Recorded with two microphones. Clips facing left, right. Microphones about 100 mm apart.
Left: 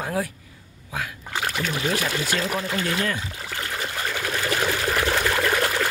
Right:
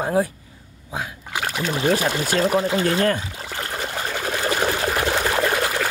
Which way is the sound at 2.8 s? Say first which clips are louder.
Right 6 dB; 40° right (ahead or behind).